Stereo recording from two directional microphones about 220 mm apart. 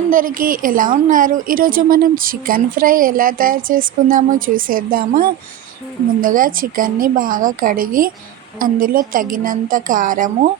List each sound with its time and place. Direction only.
0.1 s a woman's voice: 40° right (ahead or behind)